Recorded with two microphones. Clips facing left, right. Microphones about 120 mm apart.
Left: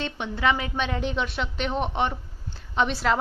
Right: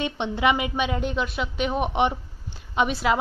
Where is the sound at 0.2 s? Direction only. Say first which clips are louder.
Right 2 dB; 15° right (ahead or behind).